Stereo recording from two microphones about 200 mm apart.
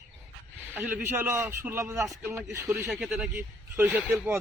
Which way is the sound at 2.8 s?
Centre (ahead or behind).